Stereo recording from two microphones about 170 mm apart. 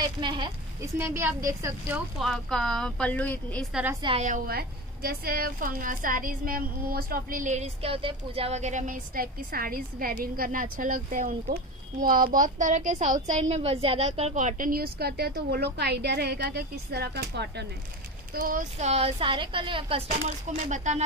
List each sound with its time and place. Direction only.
0.0 s a woman's voice: 25° right (ahead or behind)
0.9 s a woman's voice: 15° right (ahead or behind)
2.1 s speech: centre (ahead or behind)
4.0 s a woman's voice: 30° right (ahead or behind)
4.5 s a woman's voice: 65° right (ahead or behind); by 17.6 s 80° right
18.3 s a woman's voice: 50° right (ahead or behind)